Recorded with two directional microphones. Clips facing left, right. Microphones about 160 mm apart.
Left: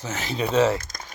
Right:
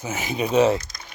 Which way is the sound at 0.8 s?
50° left (ahead or behind).